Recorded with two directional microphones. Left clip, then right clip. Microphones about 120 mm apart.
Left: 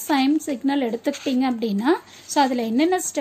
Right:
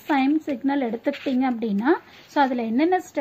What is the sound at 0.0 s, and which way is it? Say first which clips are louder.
A woman's voice: left 1 dB; 20° left (ahead or behind).